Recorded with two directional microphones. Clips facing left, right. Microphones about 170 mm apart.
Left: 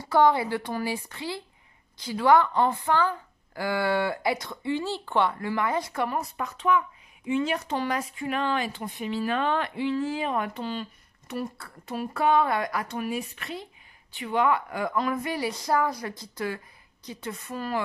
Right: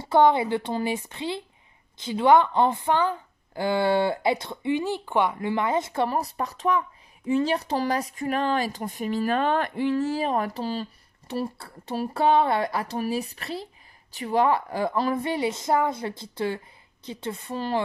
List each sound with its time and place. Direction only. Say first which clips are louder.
0.0 s a woman's voice: right 2 dB; 25° right (ahead or behind)